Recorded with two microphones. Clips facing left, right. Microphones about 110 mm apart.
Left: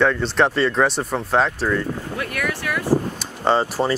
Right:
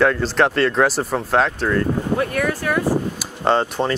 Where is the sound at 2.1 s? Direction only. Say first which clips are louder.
Right 4 dB; 30° right (ahead or behind).